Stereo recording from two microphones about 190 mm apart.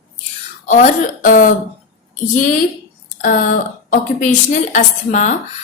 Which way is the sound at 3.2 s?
45° left (ahead or behind).